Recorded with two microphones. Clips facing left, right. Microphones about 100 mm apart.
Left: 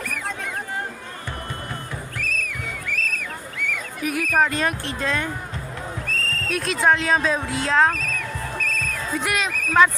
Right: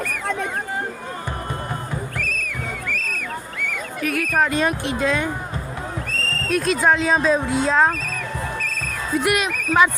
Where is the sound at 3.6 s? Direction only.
45° right (ahead or behind).